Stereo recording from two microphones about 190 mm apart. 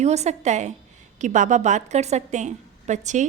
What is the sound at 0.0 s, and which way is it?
A woman's voice, 35° right (ahead or behind).